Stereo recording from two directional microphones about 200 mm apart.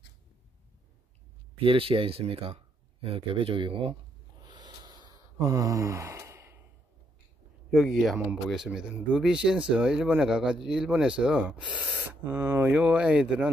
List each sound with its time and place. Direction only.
1.6 s speech: 25° right (ahead or behind)
4.5 s snort: 20° right (ahead or behind)
5.4 s gasp: 15° right (ahead or behind)
7.7 s speech: centre (ahead or behind); by 12.7 s 15° right (ahead or behind)
12.7 s speech: 5° right (ahead or behind)